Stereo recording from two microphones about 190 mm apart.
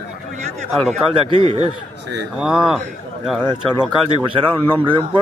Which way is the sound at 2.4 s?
5° right (ahead or behind).